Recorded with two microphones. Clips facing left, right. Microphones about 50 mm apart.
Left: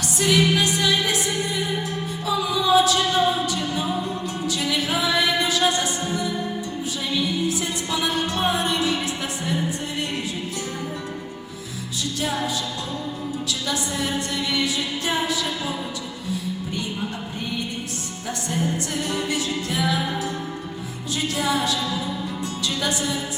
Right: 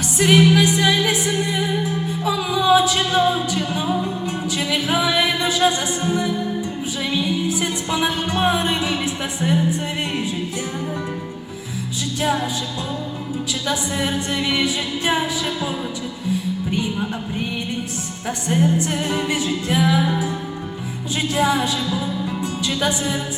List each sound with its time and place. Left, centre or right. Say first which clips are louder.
0.2 s music: right 5 dB; right
13.7 s music: right 4 dB; right
18.3 s music: right 6 dB; right
21.2 s speech: right 4 dB; right